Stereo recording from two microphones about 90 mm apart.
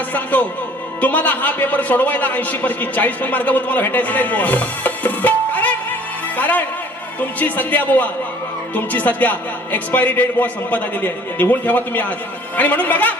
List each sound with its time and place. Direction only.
0.1 s a man's voice: 20° left (ahead or behind)